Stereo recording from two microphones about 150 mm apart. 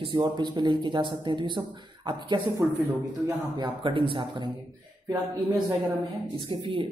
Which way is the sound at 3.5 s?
30° right (ahead or behind).